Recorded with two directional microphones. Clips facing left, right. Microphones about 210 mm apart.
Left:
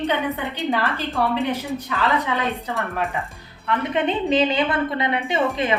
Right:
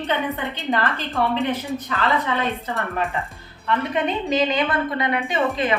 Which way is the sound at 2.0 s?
15° left (ahead or behind).